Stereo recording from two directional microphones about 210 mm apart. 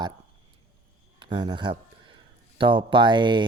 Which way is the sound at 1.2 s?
20° right (ahead or behind).